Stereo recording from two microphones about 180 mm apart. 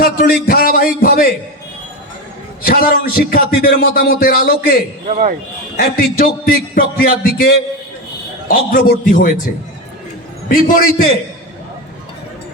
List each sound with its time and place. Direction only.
0.0 s a man's voice: 55° left (ahead or behind)
2.6 s a man's voice: 55° left (ahead or behind)
5.0 s speech: 45° right (ahead or behind)
5.7 s a man's voice: 55° left (ahead or behind)
10.5 s a man's voice: 50° left (ahead or behind)